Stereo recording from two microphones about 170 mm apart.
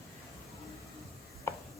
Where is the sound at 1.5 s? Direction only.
15° left (ahead or behind).